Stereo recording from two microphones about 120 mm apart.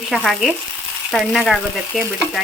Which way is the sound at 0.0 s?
Centre (ahead or behind).